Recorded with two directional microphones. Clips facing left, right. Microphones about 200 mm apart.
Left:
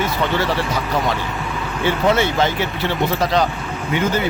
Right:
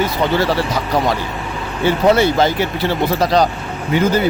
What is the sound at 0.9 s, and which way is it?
A man's voice, 35° right (ahead or behind).